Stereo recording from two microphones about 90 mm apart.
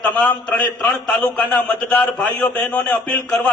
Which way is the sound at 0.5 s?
15° left (ahead or behind).